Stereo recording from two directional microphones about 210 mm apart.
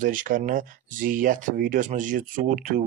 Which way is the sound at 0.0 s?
40° right (ahead or behind).